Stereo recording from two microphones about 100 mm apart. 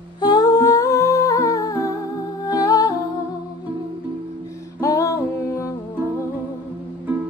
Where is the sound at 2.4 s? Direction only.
40° left (ahead or behind).